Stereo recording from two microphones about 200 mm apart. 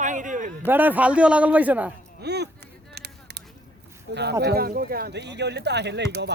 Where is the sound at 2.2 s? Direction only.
55° right (ahead or behind).